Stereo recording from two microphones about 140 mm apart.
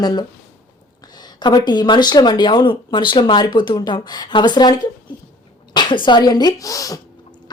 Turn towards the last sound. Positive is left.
turn(degrees=25)  # may be behind; listen again after turning